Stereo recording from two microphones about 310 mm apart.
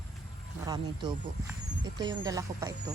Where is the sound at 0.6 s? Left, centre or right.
Centre.